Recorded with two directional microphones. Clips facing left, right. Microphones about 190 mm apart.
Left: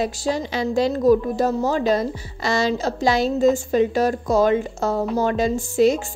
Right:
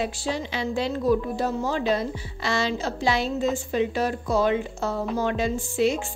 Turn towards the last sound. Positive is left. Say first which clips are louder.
# left 6 dB
turn(degrees=40)  # may be behind; listen again after turning